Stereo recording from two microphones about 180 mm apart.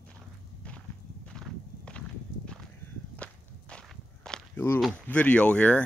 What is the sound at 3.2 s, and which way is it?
Walk, 5° left (ahead or behind).